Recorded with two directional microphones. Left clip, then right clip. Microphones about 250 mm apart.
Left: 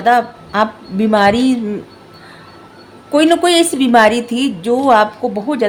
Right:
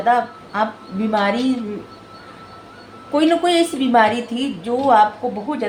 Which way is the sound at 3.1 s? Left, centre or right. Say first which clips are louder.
Left 5 dB; left.